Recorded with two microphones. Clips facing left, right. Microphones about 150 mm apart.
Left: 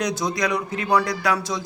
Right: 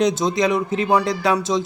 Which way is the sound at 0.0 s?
25° right (ahead or behind).